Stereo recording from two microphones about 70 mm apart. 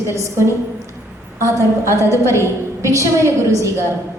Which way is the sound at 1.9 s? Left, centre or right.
Left.